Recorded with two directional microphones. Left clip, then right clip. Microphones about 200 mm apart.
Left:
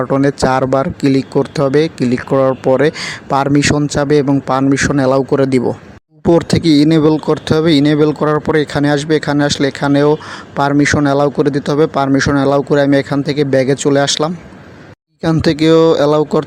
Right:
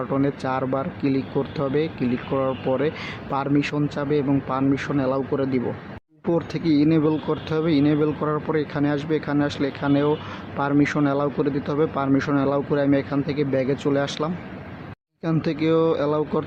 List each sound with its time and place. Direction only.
0.0 s speech: 40° left (ahead or behind)